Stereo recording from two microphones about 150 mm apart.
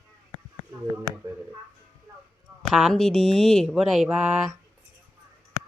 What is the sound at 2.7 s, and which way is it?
Speech, centre (ahead or behind).